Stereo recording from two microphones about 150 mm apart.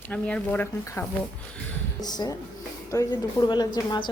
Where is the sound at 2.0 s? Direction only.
25° left (ahead or behind).